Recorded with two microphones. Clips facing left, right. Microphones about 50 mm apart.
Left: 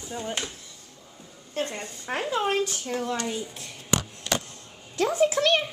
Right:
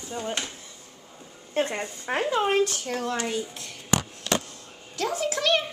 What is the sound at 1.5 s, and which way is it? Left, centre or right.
Speech, right.